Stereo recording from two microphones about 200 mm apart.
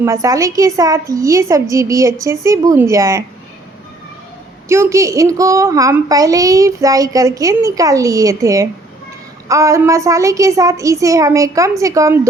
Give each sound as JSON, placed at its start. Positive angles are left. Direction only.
{"t": 0.0, "sound": "a child's voice", "side_deg": -15}
{"t": 4.7, "sound": "a child's voice", "side_deg": -15}